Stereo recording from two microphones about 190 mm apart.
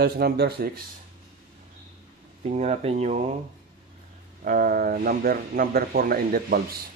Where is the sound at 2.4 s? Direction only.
35° right (ahead or behind).